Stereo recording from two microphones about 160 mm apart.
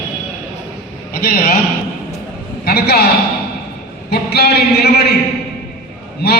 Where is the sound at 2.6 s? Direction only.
75° left (ahead or behind).